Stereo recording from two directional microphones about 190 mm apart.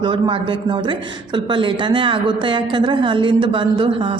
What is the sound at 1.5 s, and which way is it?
A woman's voice, 25° right (ahead or behind).